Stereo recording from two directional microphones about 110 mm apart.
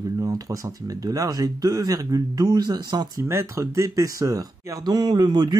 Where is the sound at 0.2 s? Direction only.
30° right (ahead or behind).